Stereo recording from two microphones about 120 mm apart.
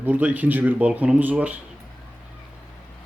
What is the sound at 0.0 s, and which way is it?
Speech, 15° right (ahead or behind).